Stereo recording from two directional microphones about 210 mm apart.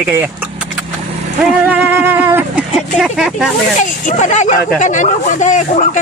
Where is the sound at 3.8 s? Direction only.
35° left (ahead or behind).